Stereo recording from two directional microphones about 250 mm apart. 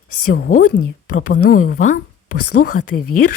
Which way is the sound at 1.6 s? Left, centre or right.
Left.